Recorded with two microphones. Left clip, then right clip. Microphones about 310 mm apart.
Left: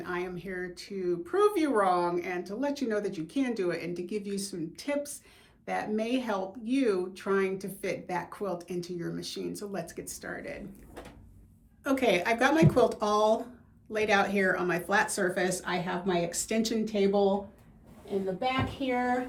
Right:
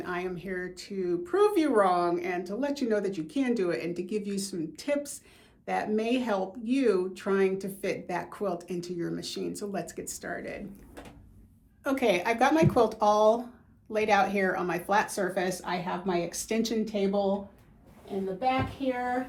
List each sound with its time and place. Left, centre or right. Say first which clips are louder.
0.0 s speech: right 1 dB; centre
11.8 s speech: even; centre
18.8 s speech: right 1 dB; centre